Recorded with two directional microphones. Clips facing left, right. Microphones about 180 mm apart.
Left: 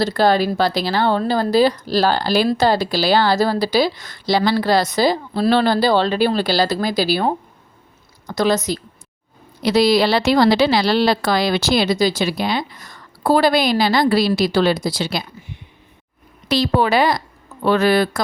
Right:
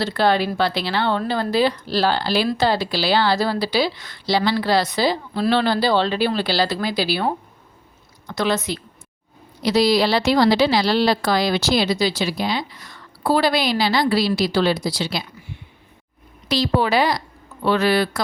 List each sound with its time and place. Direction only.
0.0 s a woman's voice: 40° left (ahead or behind)
8.3 s speech: 40° left (ahead or behind)
9.6 s a woman's voice: 60° left (ahead or behind)
16.5 s a woman's voice: 55° left (ahead or behind)